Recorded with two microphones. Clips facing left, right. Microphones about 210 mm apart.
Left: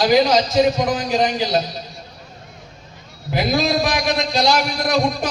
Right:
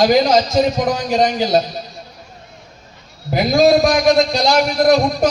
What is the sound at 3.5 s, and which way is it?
A man's voice, 45° right (ahead or behind).